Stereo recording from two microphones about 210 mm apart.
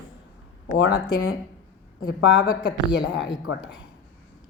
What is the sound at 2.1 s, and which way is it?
Speech, 60° left (ahead or behind).